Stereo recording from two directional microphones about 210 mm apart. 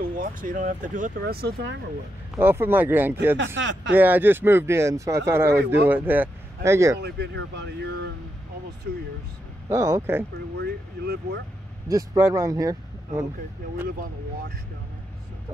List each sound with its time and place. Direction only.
0.0 s speech: 40° right (ahead or behind)
2.3 s speech: 10° right (ahead or behind)
3.3 s speech: 60° right (ahead or behind)
3.9 s speech: 10° right (ahead or behind)
7.0 s speech: 55° right (ahead or behind)
9.7 s speech: 15° right (ahead or behind)
10.6 s speech: 55° right (ahead or behind)
11.9 s speech: 15° right (ahead or behind)